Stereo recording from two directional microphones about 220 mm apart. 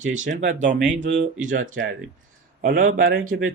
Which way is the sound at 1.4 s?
35° right (ahead or behind).